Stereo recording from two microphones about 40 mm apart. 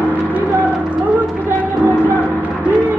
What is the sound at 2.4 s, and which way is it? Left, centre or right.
Music, right.